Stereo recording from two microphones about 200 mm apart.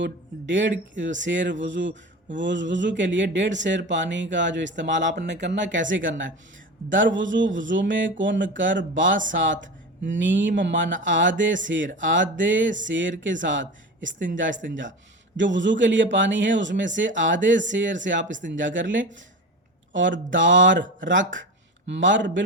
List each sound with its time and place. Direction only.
0.0 s speech: 65° right (ahead or behind)